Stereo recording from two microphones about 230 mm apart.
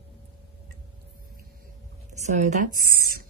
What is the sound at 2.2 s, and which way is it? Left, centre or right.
Speech, right.